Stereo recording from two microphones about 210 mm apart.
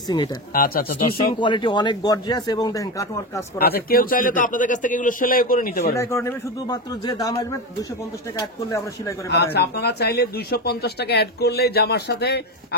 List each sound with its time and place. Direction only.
0.5 s speech: 45° left (ahead or behind)
1.3 s a man's voice: 20° left (ahead or behind)
3.5 s a man's voice: 45° left (ahead or behind)
5.9 s speech: 15° left (ahead or behind)
8.4 s speech: 15° left (ahead or behind)
9.3 s speech: 50° left (ahead or behind)